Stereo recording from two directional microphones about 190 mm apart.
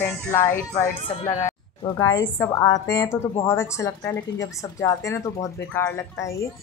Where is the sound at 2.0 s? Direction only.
15° left (ahead or behind).